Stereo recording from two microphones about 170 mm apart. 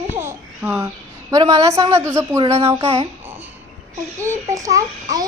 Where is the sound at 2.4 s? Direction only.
35° right (ahead or behind).